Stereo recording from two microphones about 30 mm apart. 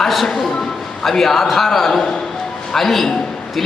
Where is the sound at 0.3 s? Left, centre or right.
Centre.